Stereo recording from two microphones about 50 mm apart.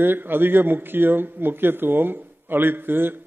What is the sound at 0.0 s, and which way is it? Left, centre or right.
A man's voice, right.